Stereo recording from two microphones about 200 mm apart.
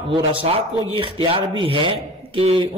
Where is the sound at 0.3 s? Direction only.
25° right (ahead or behind).